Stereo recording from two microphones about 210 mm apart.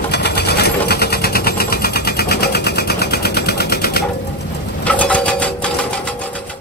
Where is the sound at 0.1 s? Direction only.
50° left (ahead or behind).